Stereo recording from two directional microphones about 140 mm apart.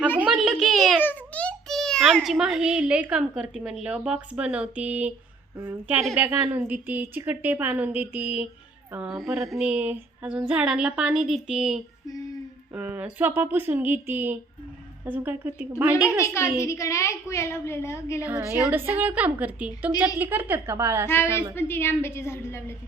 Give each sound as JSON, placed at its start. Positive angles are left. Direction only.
{"t": 0.2, "sound": "a sound", "side_deg": -5}
{"t": 1.0, "sound": "a child's voice", "side_deg": 10}
{"t": 16.0, "sound": "a woman's voice", "side_deg": 20}
{"t": 18.3, "sound": "a woman's voice", "side_deg": -10}
{"t": 21.1, "sound": "a woman's voice", "side_deg": 15}